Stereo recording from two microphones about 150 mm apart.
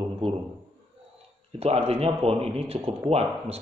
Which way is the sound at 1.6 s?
45° right (ahead or behind).